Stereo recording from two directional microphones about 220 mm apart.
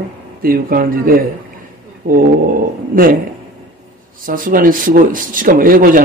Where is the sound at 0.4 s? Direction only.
40° right (ahead or behind).